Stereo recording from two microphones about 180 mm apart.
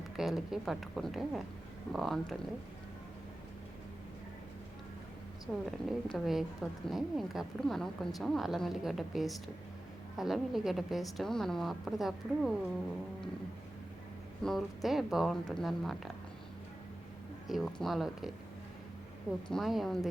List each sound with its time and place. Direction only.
0.2 s a woman's voice: centre (ahead or behind)
5.5 s a woman's voice: 10° left (ahead or behind)
14.4 s a woman's voice: centre (ahead or behind)
17.5 s a woman's voice: centre (ahead or behind)
19.5 s a woman's voice: centre (ahead or behind)